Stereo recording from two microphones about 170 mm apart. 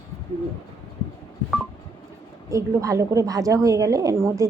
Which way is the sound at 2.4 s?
20° right (ahead or behind).